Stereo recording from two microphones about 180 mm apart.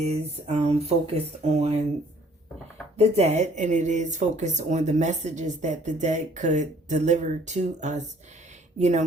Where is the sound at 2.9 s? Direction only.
35° right (ahead or behind).